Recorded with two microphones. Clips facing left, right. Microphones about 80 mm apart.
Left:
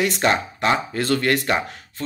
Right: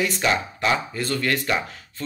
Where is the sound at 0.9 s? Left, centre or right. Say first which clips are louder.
Left 5 dB; left.